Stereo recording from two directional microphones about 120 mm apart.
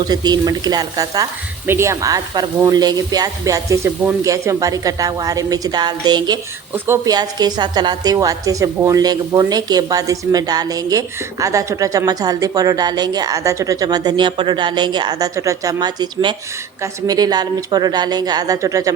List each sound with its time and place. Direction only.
0.0 s a woman's voice: 35° right (ahead or behind)
1.6 s a woman's voice: 20° right (ahead or behind)
6.7 s speech: 20° right (ahead or behind)
7.0 s a woman's voice: 35° right (ahead or behind)